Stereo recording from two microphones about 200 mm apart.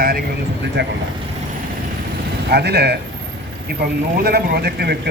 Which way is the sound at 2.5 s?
55° right (ahead or behind).